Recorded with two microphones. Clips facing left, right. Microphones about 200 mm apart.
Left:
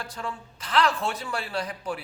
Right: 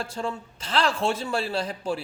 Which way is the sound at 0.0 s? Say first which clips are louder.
Right 5 dB; 25° right (ahead or behind).